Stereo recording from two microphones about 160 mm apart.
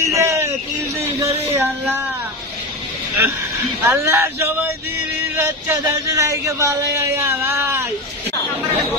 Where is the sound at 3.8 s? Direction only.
15° right (ahead or behind).